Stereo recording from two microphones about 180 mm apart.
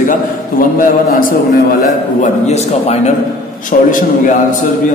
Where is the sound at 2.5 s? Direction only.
40° left (ahead or behind).